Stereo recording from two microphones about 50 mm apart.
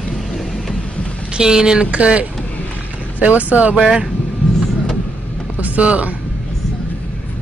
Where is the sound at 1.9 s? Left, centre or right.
Right.